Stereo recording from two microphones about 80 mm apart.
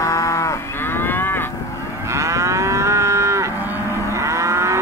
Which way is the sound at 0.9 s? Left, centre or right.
Left.